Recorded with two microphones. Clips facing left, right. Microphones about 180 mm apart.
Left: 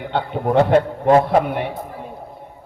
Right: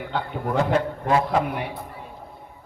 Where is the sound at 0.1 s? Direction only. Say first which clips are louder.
Left 8 dB; 30° left (ahead or behind).